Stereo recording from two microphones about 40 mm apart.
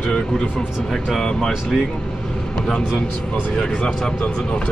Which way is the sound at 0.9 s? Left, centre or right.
Centre.